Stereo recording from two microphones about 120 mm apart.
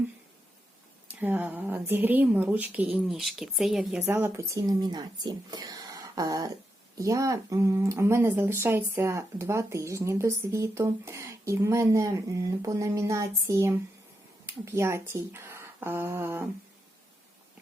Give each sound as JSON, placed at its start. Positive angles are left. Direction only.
{"t": 1.0, "sound": "speech", "side_deg": -15}
{"t": 4.1, "sound": "speech", "side_deg": -20}